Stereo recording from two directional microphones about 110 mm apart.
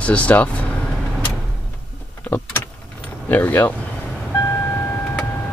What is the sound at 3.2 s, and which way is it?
Speech, 15° left (ahead or behind).